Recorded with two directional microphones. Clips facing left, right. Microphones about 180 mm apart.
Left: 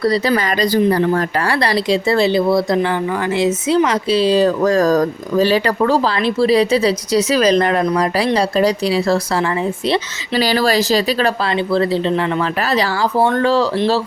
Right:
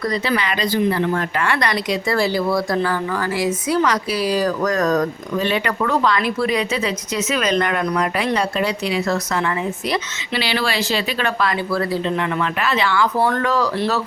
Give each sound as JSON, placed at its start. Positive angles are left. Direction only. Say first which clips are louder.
{"t": 0.0, "sound": "speech", "louder": "left 5 dB", "side_deg": 35}
{"t": 10.4, "sound": "speech", "louder": "left 7 dB", "side_deg": 40}